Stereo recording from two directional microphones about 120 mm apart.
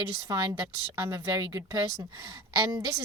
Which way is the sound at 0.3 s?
35° right (ahead or behind).